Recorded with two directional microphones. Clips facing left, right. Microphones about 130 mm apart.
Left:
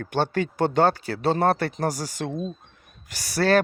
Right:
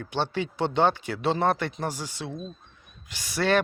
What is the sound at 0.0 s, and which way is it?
Speech, 45° left (ahead or behind).